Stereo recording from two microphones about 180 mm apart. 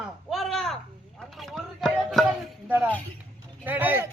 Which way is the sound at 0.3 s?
Centre (ahead or behind).